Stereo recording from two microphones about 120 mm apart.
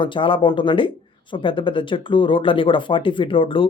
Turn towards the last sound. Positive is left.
turn(degrees=45)  # may be behind; listen again after turning